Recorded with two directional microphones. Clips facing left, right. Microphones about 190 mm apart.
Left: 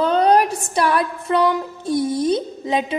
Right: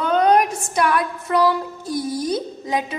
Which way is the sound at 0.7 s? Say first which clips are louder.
Left 1 dB; 30° left (ahead or behind).